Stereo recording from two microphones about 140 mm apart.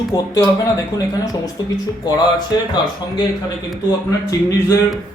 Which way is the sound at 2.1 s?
30° left (ahead or behind).